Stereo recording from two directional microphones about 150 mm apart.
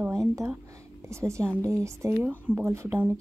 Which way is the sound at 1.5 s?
10° left (ahead or behind).